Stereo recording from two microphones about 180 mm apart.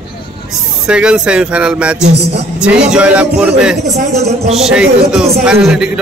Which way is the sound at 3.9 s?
35° right (ahead or behind).